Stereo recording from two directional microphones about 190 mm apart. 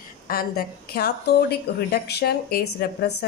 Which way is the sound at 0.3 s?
55° left (ahead or behind).